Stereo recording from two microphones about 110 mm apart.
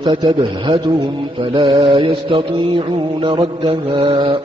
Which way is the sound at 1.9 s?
50° right (ahead or behind).